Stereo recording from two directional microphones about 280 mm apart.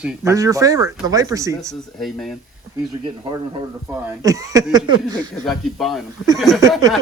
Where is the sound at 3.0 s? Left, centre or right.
Centre.